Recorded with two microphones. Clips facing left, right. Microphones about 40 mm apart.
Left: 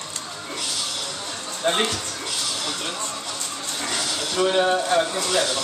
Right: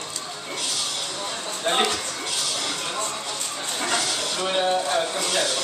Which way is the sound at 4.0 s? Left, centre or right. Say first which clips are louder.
Left 3 dB; centre.